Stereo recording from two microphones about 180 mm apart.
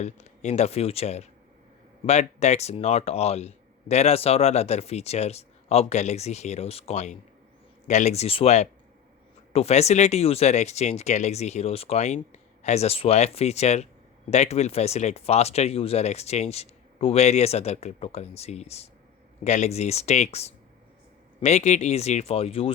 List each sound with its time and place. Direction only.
0.0 s speech: 40° left (ahead or behind)